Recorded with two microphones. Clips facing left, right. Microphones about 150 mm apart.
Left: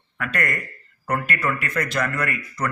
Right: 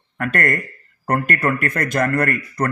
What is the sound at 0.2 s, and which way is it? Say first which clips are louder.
Speech: right 6 dB; 50° right (ahead or behind).